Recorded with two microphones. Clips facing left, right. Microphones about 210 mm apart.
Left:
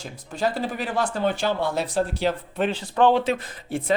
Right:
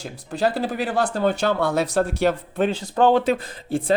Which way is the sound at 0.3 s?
35° right (ahead or behind).